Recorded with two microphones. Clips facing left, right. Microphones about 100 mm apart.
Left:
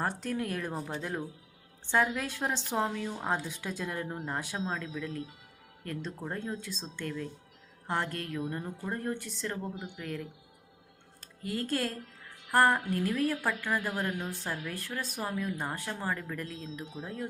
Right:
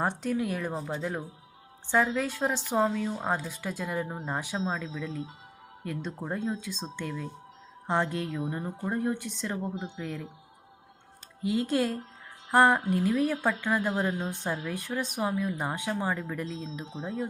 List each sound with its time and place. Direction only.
0.0 s speech: 15° right (ahead or behind)
0.3 s speech: 5° right (ahead or behind)
2.2 s speech: 10° right (ahead or behind)
3.3 s speech: 5° right (ahead or behind)
5.8 s speech: 10° right (ahead or behind)
6.1 s speech: 20° right (ahead or behind)
11.4 s speech: 15° right (ahead or behind)